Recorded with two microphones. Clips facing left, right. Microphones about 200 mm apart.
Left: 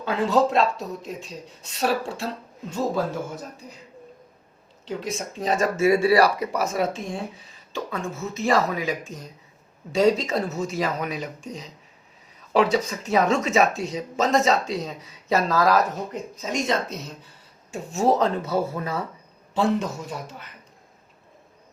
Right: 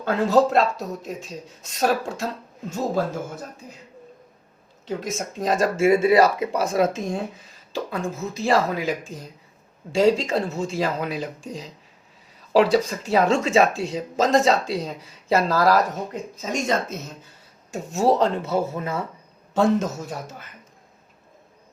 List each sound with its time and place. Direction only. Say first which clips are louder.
0.0 s speech: right 2 dB; 40° right (ahead or behind)
4.9 s speech: right 2 dB; 45° right (ahead or behind)
5.9 s speech: right 2 dB; 20° right (ahead or behind); by 7.3 s 40° right (ahead or behind)
8.3 s speech: right 1 dB; 30° right (ahead or behind)
16.4 s speech: right 1 dB; 45° right (ahead or behind)
18.4 s speech: right 1 dB; 25° right (ahead or behind)
19.5 s speech: right 3 dB; 45° right (ahead or behind)